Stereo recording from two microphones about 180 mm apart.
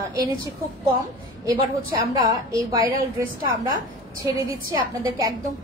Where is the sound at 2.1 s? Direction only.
20° right (ahead or behind).